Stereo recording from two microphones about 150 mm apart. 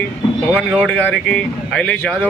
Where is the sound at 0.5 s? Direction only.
5° right (ahead or behind).